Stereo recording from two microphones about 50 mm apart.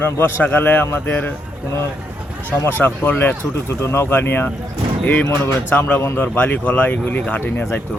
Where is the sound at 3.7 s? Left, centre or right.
Left.